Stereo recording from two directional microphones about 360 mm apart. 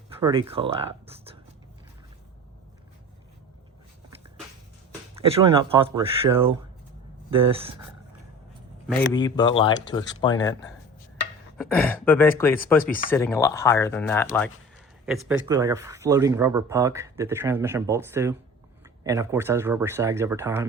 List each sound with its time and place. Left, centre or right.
0.2 s speech: centre
5.1 s speech: centre
9.0 s speech: centre
11.5 s speech: centre
12.5 s speech: left
13.1 s speech: centre